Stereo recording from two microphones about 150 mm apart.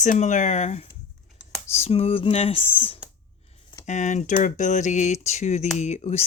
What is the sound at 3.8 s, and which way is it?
Speech, 55° left (ahead or behind).